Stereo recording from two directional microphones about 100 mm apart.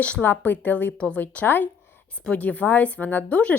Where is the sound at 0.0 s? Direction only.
15° left (ahead or behind).